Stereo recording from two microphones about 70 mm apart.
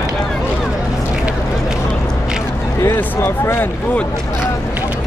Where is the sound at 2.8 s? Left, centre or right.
Left.